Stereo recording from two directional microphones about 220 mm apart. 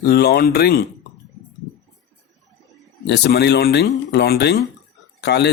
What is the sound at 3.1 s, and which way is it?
Speech, 50° left (ahead or behind).